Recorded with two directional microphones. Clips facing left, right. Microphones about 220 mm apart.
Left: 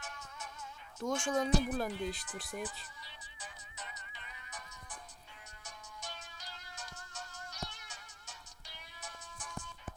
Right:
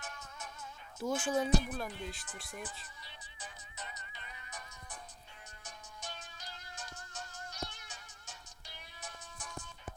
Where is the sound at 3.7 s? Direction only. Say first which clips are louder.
Right 2 dB; 40° right (ahead or behind).